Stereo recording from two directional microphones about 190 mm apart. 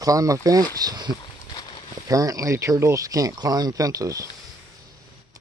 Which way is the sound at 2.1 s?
20° right (ahead or behind).